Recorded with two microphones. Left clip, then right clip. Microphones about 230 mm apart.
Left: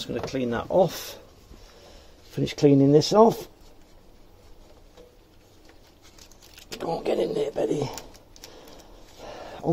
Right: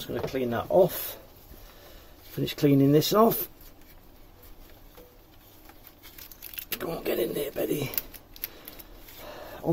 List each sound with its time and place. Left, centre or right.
0.0 s speech: left
2.3 s speech: centre
6.8 s speech: centre
9.2 s a sound: centre